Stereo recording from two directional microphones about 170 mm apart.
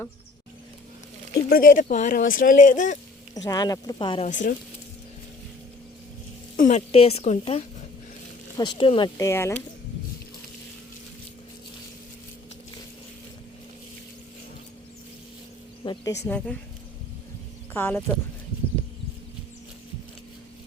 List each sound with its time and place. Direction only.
1.5 s speech: 55° left (ahead or behind)
3.3 s speech: 20° left (ahead or behind)
4.3 s speech: 50° left (ahead or behind)
6.6 s speech: 45° left (ahead or behind)
8.5 s speech: 25° left (ahead or behind)
9.1 s speech: 15° left (ahead or behind)
15.8 s speech: 25° left (ahead or behind)
16.2 s speech: 10° left (ahead or behind)
17.7 s speech: 10° left (ahead or behind)